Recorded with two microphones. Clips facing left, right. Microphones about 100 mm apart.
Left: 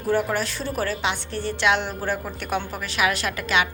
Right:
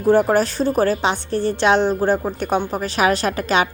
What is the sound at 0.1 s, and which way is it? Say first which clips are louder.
Speech: right 8 dB; 40° right (ahead or behind).